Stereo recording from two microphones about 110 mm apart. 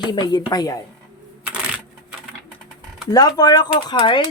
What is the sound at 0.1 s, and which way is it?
Speech, 40° left (ahead or behind).